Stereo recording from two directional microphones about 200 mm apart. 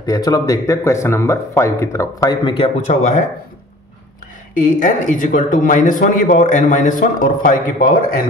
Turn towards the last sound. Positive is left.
turn(degrees=40)  # may be behind; listen again after turning